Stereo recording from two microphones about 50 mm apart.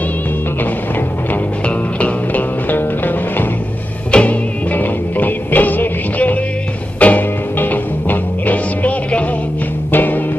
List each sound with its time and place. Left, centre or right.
2.0 s music: left
4.1 s music: left
4.7 s music: left